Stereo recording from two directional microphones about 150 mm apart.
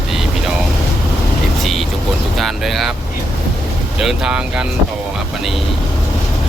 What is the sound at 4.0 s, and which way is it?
Speech, 5° right (ahead or behind).